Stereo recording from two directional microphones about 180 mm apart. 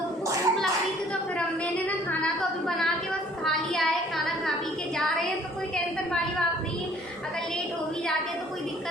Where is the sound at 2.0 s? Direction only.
5° left (ahead or behind).